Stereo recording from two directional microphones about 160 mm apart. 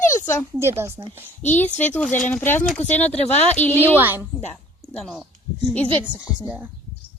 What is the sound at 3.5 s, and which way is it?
Speech, 10° left (ahead or behind).